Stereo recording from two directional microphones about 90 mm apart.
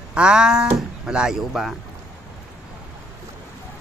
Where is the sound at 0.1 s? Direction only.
10° right (ahead or behind).